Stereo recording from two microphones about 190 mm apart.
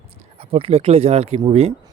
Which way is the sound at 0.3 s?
30° right (ahead or behind).